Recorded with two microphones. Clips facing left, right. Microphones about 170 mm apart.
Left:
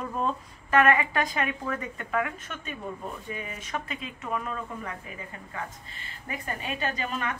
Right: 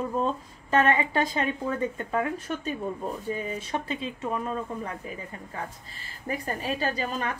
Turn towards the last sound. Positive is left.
turn(degrees=-35)  # may be behind; listen again after turning